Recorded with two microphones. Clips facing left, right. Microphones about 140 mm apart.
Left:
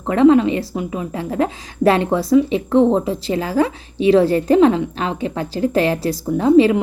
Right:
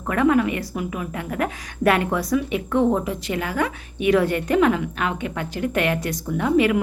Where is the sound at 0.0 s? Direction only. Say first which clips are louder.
Left 7 dB; 25° left (ahead or behind).